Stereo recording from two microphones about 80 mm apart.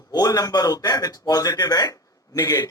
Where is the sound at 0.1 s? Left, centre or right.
Left.